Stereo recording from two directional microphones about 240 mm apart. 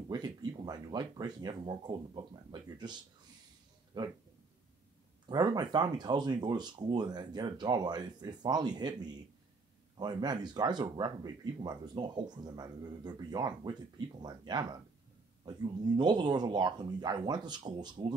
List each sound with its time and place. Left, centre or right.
0.1 s speech: centre
5.3 s speech: centre